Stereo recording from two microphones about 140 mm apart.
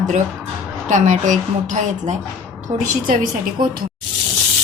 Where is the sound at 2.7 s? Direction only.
75° right (ahead or behind).